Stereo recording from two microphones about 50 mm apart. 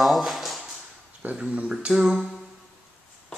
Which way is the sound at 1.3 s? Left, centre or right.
Right.